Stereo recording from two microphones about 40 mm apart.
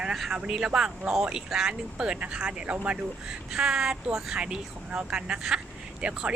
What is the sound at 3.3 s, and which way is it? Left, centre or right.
Speech, centre.